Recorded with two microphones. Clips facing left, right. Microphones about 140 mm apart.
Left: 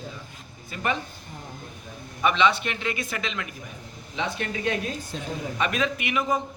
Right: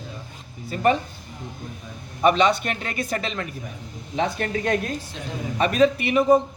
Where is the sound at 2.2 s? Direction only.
40° right (ahead or behind).